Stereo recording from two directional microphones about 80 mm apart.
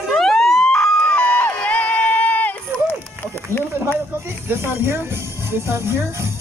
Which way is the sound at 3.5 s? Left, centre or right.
Right.